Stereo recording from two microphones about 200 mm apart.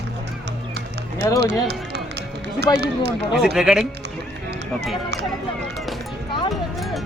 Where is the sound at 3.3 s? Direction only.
5° right (ahead or behind).